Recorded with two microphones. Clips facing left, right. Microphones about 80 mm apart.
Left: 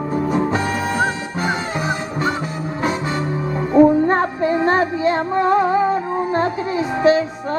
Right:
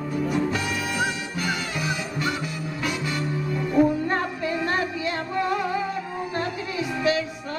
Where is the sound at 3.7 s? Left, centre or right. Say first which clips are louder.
Left 9 dB; left.